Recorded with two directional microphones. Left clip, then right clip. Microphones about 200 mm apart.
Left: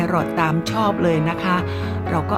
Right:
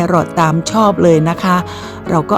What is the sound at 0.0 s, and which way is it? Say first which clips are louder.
Speech: right 7 dB; 20° right (ahead or behind).